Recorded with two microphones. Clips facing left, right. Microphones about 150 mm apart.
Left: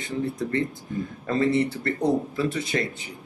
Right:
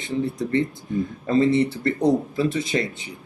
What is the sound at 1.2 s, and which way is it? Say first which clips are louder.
Speech: right 3 dB; 20° right (ahead or behind).